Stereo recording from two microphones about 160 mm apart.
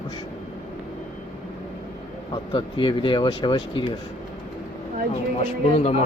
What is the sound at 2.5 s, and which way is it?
Speech, 30° left (ahead or behind).